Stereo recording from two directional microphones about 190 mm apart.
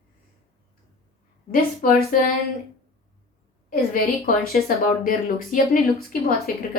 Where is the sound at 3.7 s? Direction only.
50° left (ahead or behind).